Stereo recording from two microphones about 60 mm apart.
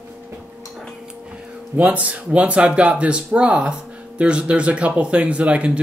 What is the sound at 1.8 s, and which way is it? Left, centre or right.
Speech, right.